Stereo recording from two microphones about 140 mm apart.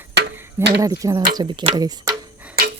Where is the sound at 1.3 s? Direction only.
35° right (ahead or behind).